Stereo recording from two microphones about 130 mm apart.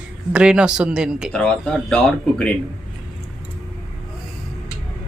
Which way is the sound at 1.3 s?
5° left (ahead or behind).